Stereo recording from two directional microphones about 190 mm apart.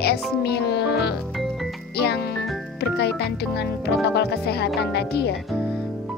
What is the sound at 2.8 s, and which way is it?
Speech, 60° left (ahead or behind).